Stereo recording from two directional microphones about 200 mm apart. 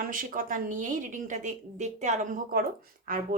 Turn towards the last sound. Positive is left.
turn(degrees=-45)  # may be behind; listen again after turning